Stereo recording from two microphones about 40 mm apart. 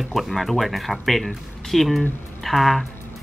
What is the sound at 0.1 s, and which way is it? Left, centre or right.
Speech, centre.